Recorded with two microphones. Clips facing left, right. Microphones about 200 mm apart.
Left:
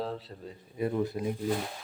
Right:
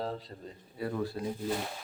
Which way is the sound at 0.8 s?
20° left (ahead or behind).